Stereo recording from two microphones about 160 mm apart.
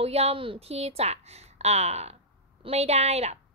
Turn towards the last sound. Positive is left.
turn(degrees=-40)  # may be behind; listen again after turning